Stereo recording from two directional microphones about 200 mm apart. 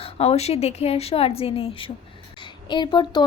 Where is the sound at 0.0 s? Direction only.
30° left (ahead or behind).